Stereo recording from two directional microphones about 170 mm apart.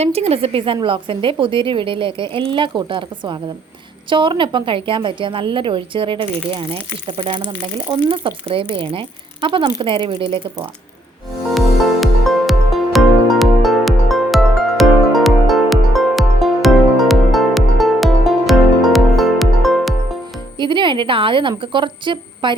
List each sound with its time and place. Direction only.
0.0 s a woman's voice: 35° right (ahead or behind)
11.4 s music: centre (ahead or behind)
20.6 s a woman's voice: 30° right (ahead or behind)